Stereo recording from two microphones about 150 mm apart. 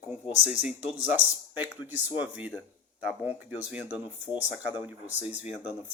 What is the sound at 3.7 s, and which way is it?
Speech, 10° right (ahead or behind).